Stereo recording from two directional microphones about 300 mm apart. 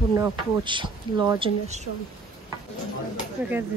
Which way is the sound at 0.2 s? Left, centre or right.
Centre.